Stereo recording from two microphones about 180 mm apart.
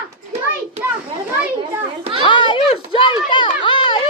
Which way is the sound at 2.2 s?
25° left (ahead or behind).